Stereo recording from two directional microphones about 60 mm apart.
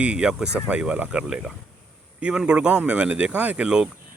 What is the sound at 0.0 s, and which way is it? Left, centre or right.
Speech, centre.